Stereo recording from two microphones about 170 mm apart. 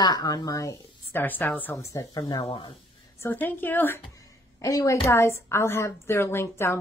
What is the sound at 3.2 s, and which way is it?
A woman's voice, 10° left (ahead or behind).